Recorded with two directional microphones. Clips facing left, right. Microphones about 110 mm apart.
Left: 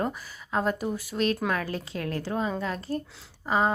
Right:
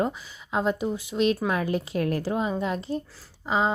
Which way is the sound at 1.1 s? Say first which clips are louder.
Right 4 dB; 40° left (ahead or behind).